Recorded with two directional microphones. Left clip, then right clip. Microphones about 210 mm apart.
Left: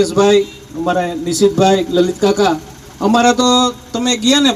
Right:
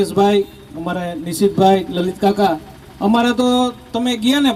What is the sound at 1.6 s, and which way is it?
A man's voice, 70° right (ahead or behind).